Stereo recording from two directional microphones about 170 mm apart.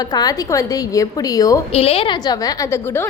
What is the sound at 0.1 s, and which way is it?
A woman's voice, 25° left (ahead or behind).